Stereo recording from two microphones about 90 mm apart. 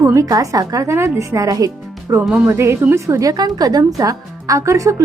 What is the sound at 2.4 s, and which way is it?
A woman's voice, 30° right (ahead or behind).